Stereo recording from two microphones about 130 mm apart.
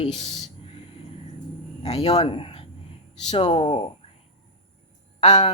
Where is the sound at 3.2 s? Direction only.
55° left (ahead or behind).